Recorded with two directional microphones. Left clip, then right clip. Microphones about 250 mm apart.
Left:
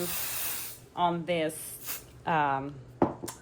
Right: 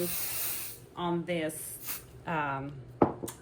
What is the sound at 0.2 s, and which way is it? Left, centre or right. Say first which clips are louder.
Spray: left 2 dB; centre.